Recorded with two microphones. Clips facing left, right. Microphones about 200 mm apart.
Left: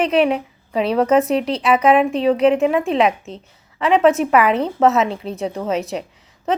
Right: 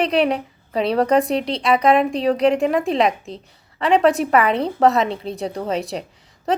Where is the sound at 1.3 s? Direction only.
30° right (ahead or behind).